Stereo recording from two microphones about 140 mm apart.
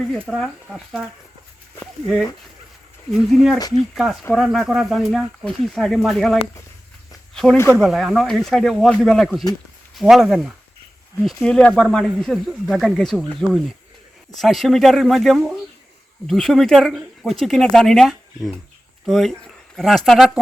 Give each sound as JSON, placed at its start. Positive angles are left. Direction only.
{"t": 0.3, "sound": "speech", "side_deg": 0}
{"t": 7.4, "sound": "speech", "side_deg": 0}
{"t": 11.3, "sound": "speech", "side_deg": 10}